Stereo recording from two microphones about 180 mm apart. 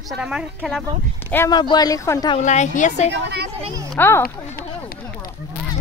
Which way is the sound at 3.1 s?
70° right (ahead or behind).